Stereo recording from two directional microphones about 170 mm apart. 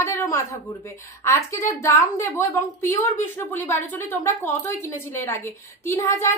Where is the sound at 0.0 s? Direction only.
15° left (ahead or behind).